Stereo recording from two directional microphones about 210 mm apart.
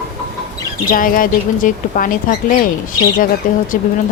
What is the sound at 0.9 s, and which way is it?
Speech, 40° left (ahead or behind).